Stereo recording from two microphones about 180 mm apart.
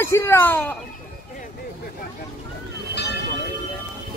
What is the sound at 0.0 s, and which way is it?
Speech, 15° left (ahead or behind).